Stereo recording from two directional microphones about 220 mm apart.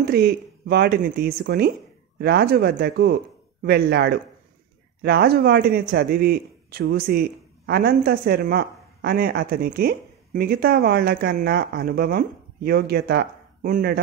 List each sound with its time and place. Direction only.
0.0 s speech: 45° right (ahead or behind)